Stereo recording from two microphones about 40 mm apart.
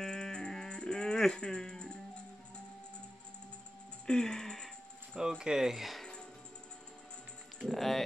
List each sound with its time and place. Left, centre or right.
0.0 s music: centre
4.0 s music: centre
5.4 s speech: centre
7.6 s music: centre